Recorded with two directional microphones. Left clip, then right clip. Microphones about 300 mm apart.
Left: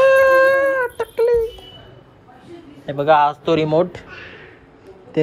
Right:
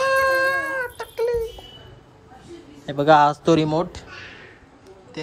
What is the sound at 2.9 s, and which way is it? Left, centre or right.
Speech, centre.